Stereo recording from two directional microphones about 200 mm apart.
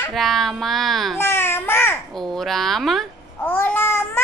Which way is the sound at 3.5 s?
10° left (ahead or behind).